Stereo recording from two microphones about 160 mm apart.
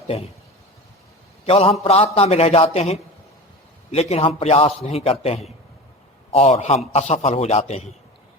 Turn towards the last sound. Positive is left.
turn(degrees=40)  # may be behind; listen again after turning